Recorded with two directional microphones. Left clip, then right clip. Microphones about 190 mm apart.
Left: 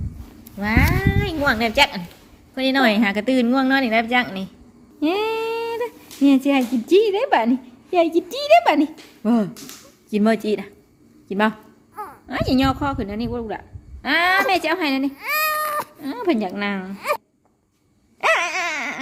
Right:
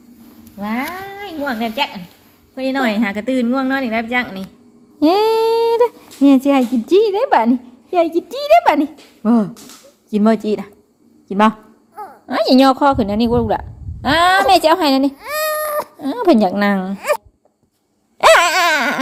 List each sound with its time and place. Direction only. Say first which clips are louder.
0.6 s speech: left 3 dB; 20° left (ahead or behind)
1.5 s a woman's voice: left 3 dB; 45° left (ahead or behind)
2.6 s a woman's voice: even; 20° left (ahead or behind); by 4.4 s centre (ahead or behind)
4.9 s a sound: right 8 dB; 35° right (ahead or behind)
6.2 s a woman's voice: right 5 dB; 15° right (ahead or behind)
12.3 s a woman's voice: right 9 dB; 25° right (ahead or behind)
15.1 s baby cry: right 1 dB; 10° left (ahead or behind)
16.0 s a woman's voice: right 13 dB; 30° right (ahead or behind)
18.2 s dog: right 9 dB; 40° right (ahead or behind)